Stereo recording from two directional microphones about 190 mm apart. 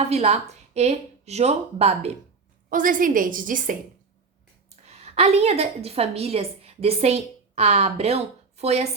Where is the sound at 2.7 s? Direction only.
45° right (ahead or behind).